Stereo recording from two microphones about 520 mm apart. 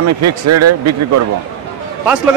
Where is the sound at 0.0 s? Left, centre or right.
Right.